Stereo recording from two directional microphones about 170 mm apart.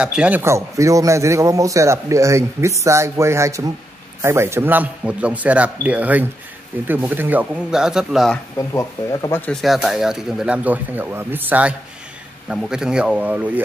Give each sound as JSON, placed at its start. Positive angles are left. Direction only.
{"t": 0.0, "sound": "a man's voice", "side_deg": -5}
{"t": 8.5, "sound": "speech", "side_deg": 20}
{"t": 9.5, "sound": "a man's voice", "side_deg": 5}